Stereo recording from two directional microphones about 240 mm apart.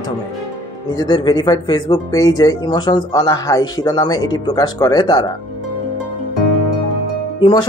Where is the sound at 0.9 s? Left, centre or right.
Centre.